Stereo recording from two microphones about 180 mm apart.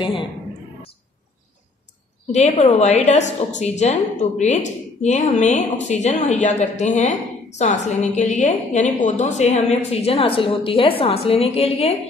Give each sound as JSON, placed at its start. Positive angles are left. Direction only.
{"t": 0.0, "sound": "a woman's voice", "side_deg": 25}
{"t": 2.3, "sound": "a woman's voice", "side_deg": 40}